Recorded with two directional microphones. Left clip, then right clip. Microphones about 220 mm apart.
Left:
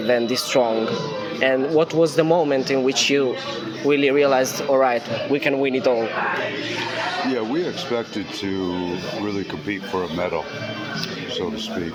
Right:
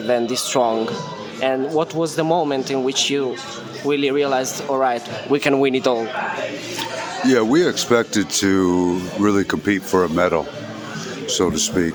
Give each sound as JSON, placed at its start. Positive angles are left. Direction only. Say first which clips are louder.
{"t": 0.1, "sound": "speech", "louder": "even", "side_deg": -15}
{"t": 5.3, "sound": "speech", "louder": "right 4 dB", "side_deg": -30}
{"t": 7.3, "sound": "speech", "louder": "right 7 dB", "side_deg": -55}